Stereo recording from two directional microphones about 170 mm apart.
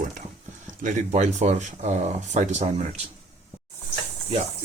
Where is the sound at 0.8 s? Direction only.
45° right (ahead or behind).